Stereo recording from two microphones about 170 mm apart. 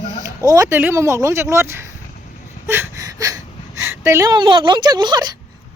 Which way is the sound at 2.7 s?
15° right (ahead or behind).